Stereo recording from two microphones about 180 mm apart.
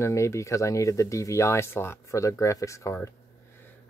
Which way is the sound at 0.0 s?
15° left (ahead or behind).